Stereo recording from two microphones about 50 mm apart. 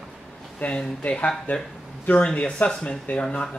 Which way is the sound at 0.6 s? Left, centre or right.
Left.